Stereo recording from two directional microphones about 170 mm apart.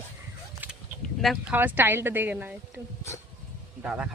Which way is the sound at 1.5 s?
10° right (ahead or behind).